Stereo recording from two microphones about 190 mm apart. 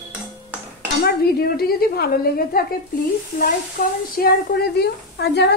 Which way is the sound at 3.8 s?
50° left (ahead or behind).